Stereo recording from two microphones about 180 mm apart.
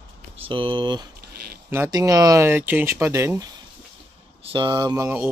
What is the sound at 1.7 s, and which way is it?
Speech, 15° right (ahead or behind).